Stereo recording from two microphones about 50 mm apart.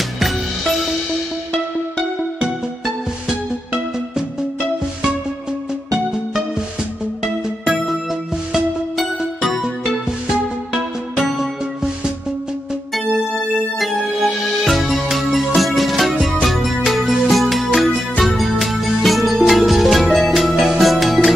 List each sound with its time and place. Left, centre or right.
0.2 s music: centre
7.6 s music: centre
12.9 s music: centre